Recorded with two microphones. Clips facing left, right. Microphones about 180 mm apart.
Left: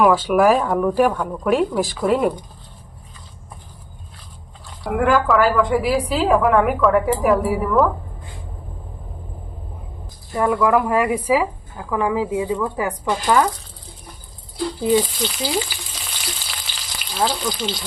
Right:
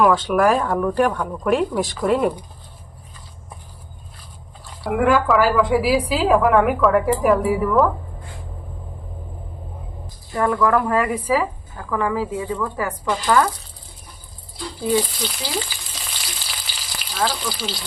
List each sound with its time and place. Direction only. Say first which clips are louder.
0.0 s a woman's voice: left 2 dB; 5° left (ahead or behind)
4.8 s a woman's voice: even; centre (ahead or behind)
10.3 s a woman's voice: left 1 dB; 10° left (ahead or behind)
14.8 s a woman's voice: left 2 dB; 5° left (ahead or behind)
15.5 s frying: left 3 dB; 10° left (ahead or behind)
16.0 s frying: left 2 dB; 5° right (ahead or behind)